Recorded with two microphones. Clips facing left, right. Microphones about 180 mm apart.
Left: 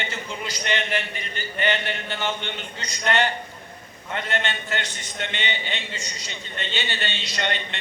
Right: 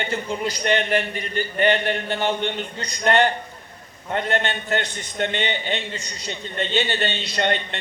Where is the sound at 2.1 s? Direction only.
40° right (ahead or behind).